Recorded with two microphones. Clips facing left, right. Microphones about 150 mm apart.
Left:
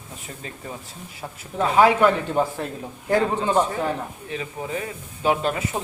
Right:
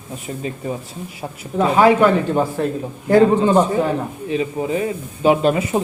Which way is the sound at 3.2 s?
20° right (ahead or behind).